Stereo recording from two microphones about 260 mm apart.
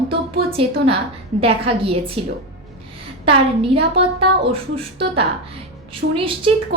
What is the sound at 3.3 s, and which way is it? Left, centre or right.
A woman's voice, right.